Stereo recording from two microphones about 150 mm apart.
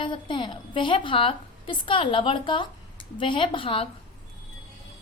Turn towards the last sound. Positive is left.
turn(degrees=40)  # may be behind; listen again after turning